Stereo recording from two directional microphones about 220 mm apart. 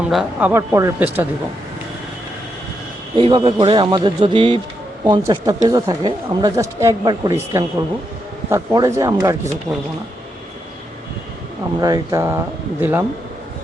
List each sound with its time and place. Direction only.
0.1 s speech: 5° right (ahead or behind)
3.2 s a man's voice: 25° right (ahead or behind)
8.4 s speech: 15° right (ahead or behind)
11.8 s speech: 15° right (ahead or behind)